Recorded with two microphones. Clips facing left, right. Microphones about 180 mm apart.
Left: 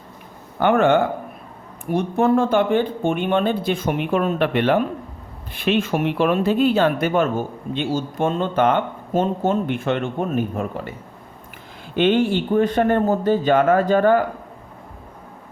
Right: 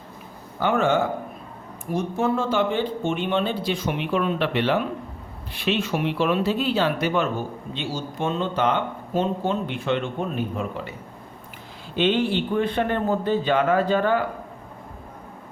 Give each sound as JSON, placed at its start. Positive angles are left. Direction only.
{"t": 0.6, "sound": "speech", "side_deg": 60}
{"t": 11.9, "sound": "speech", "side_deg": 50}